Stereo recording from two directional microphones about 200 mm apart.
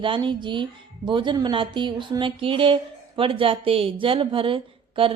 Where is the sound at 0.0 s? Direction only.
25° right (ahead or behind).